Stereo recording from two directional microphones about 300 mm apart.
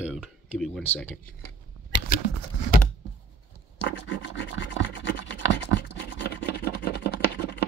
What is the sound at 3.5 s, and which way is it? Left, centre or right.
Rub, left.